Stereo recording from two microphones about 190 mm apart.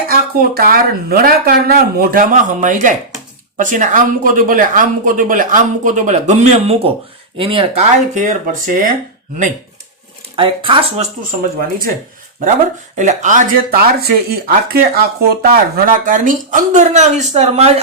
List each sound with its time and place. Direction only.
0.1 s speech: 50° right (ahead or behind)
10.3 s speech: 25° right (ahead or behind)
13.0 s speech: 40° right (ahead or behind)